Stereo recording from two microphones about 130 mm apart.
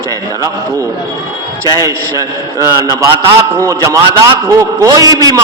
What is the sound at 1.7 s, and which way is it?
A man's voice, 30° right (ahead or behind).